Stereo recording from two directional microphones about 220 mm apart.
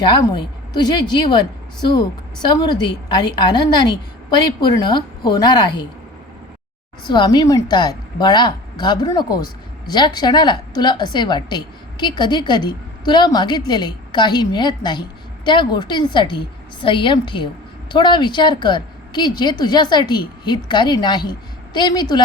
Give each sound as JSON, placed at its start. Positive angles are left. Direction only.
{"t": 0.0, "sound": "a woman's voice", "side_deg": 20}
{"t": 7.0, "sound": "a woman's voice", "side_deg": 20}